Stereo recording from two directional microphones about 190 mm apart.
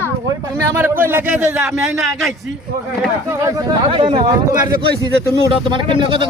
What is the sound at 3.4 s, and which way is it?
Speech, 25° right (ahead or behind).